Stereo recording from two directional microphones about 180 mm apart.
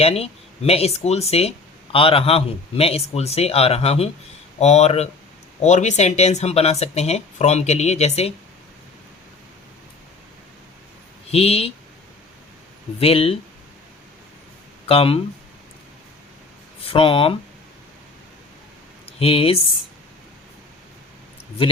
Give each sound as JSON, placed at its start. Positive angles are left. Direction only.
{"t": 0.0, "sound": "speech", "side_deg": 35}
{"t": 11.3, "sound": "speech", "side_deg": 35}
{"t": 13.0, "sound": "speech", "side_deg": 30}
{"t": 14.8, "sound": "speech", "side_deg": 30}
{"t": 16.8, "sound": "speech", "side_deg": 30}
{"t": 19.2, "sound": "speech", "side_deg": 30}